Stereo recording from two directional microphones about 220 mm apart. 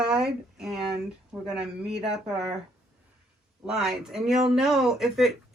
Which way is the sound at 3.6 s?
Centre (ahead or behind).